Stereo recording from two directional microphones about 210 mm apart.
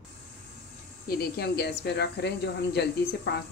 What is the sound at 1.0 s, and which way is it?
Speech, 45° left (ahead or behind).